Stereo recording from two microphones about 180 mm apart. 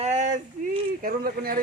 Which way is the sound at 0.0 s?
40° right (ahead or behind).